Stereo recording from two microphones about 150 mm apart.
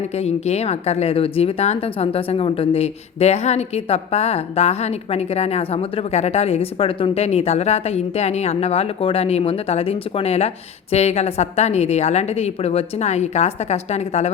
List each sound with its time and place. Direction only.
0.2 s speech: 45° left (ahead or behind)